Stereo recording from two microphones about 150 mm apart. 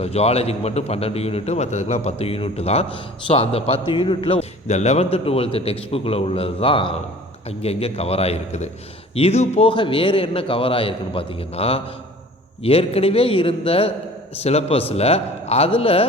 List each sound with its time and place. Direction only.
0.0 s a man's voice: 45° left (ahead or behind)